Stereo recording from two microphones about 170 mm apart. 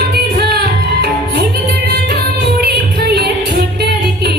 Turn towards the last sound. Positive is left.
turn(degrees=-65)  # may be behind; listen again after turning